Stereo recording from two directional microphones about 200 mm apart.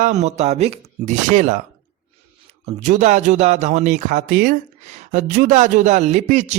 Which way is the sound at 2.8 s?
35° right (ahead or behind).